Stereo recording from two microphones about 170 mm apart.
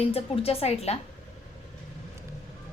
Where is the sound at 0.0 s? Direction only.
35° left (ahead or behind).